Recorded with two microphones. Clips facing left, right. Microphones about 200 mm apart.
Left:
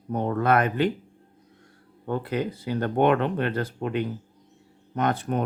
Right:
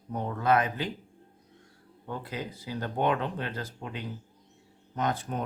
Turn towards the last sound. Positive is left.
turn(degrees=65)  # may be behind; listen again after turning